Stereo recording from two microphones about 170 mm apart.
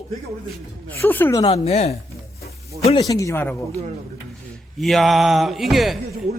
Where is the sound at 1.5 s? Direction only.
35° left (ahead or behind).